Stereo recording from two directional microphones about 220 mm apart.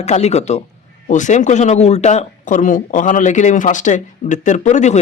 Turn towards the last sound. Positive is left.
turn(degrees=30)  # may be behind; listen again after turning